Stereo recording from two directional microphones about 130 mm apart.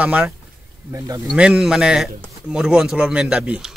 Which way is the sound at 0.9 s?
25° right (ahead or behind).